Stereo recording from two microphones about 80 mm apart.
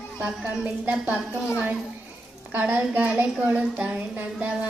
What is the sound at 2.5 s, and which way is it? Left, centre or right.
A woman's voice, right.